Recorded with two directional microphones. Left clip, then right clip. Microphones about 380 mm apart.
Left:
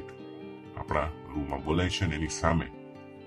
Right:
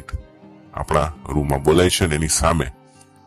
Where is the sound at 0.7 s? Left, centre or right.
Right.